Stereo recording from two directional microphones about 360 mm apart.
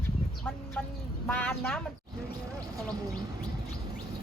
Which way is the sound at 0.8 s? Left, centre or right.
Centre.